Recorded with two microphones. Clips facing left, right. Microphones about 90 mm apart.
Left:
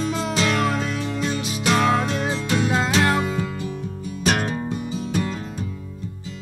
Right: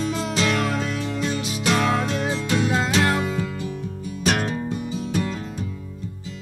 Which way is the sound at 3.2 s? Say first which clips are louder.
Left 1 dB; 25° left (ahead or behind).